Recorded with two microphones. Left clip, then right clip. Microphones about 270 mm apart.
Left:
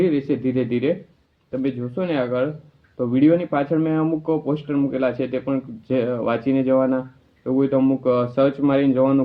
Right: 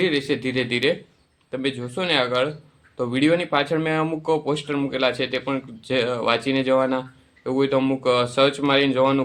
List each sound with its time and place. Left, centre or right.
0.0 s speech: right